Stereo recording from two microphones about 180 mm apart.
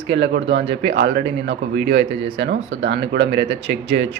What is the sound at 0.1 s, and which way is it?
Speech, 75° right (ahead or behind).